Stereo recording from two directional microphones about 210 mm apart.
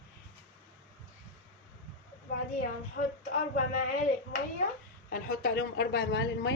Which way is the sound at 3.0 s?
45° left (ahead or behind).